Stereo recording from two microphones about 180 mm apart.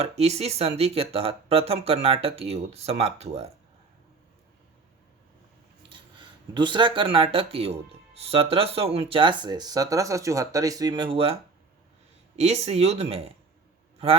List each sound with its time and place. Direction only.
0.0 s speech: 35° right (ahead or behind)
5.9 s speech: 25° right (ahead or behind)
12.4 s speech: 35° right (ahead or behind)